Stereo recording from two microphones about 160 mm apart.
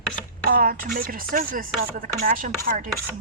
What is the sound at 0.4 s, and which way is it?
Speech, 65° right (ahead or behind).